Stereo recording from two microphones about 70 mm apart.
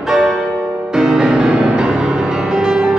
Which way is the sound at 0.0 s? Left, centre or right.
Centre.